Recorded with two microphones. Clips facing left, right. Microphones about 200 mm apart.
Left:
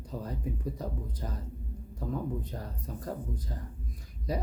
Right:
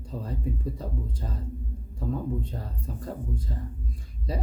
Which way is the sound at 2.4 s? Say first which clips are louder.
Right 3 dB; 30° right (ahead or behind).